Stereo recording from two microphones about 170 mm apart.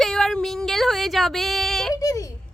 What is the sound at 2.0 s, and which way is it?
Speech, 20° left (ahead or behind).